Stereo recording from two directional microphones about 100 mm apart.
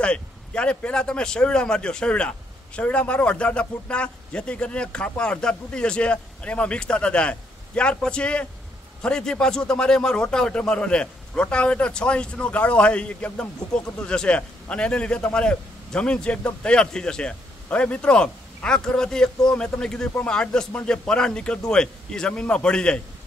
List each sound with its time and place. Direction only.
0.0 s a man's voice: 10° left (ahead or behind)